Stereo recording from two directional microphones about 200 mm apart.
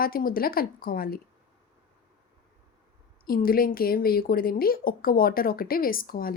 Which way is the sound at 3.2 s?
45° left (ahead or behind).